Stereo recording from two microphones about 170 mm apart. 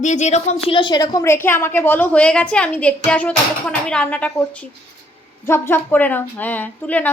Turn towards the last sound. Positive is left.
turn(degrees=10)  # may be behind; listen again after turning